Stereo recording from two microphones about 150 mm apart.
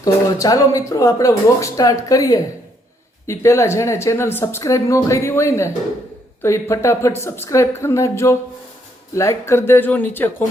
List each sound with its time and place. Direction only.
0.0 s speech: 25° left (ahead or behind)